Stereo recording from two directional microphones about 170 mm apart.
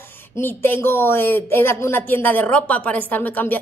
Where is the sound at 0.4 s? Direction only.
10° left (ahead or behind).